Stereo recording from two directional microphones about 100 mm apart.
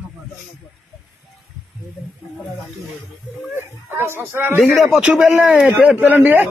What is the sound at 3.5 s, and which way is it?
Speech, 20° right (ahead or behind).